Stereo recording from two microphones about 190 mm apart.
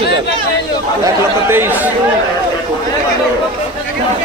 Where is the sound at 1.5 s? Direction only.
10° right (ahead or behind).